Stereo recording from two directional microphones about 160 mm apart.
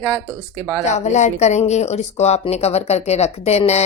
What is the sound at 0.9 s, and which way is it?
Speech, 45° left (ahead or behind).